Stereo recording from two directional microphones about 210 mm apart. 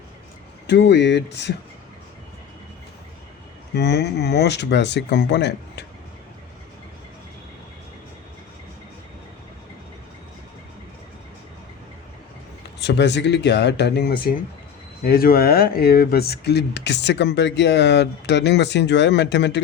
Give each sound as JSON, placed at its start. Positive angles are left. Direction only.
{"t": 0.7, "sound": "speech", "side_deg": 55}
{"t": 3.8, "sound": "speech", "side_deg": 50}
{"t": 12.8, "sound": "speech", "side_deg": 55}